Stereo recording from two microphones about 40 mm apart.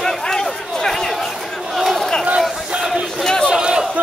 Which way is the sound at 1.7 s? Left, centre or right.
Centre.